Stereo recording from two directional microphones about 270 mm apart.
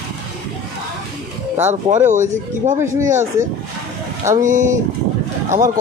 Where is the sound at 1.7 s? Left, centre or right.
Right.